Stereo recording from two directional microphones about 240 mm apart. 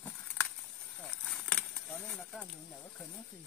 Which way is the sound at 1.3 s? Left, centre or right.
Centre.